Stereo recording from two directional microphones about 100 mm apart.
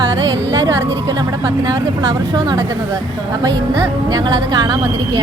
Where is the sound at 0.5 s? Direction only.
40° right (ahead or behind).